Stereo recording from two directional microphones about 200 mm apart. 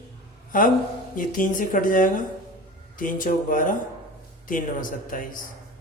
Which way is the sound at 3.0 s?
40° left (ahead or behind).